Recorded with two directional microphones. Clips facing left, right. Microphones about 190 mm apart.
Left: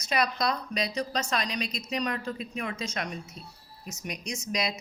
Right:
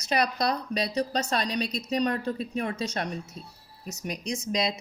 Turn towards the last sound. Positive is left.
turn(degrees=-25)  # may be behind; listen again after turning